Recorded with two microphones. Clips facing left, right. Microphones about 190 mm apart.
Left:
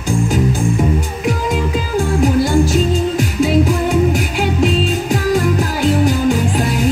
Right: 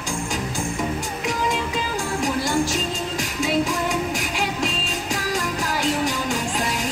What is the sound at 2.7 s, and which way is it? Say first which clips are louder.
Music: left 10 dB; 55° left (ahead or behind).